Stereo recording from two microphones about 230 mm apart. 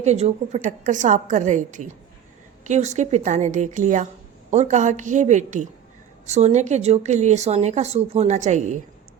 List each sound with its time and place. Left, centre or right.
0.0 s a woman's voice: right